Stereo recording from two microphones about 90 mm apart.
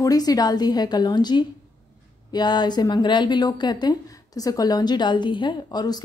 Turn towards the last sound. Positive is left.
turn(degrees=50)  # may be behind; listen again after turning